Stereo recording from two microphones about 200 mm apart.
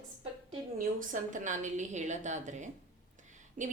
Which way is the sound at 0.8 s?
40° right (ahead or behind).